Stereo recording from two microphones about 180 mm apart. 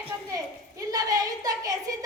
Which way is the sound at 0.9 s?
20° right (ahead or behind).